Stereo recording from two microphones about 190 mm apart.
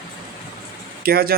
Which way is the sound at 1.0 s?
55° right (ahead or behind).